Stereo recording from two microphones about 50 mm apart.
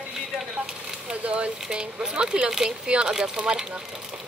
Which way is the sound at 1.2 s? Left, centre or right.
Right.